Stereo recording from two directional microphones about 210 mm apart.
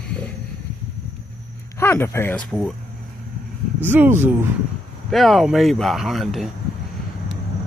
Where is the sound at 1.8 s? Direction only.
10° left (ahead or behind).